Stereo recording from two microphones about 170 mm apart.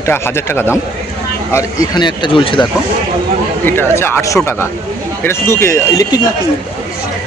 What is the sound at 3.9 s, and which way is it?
Speech, 15° left (ahead or behind).